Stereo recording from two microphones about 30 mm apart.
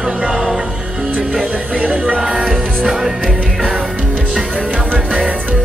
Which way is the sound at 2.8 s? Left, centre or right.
Centre.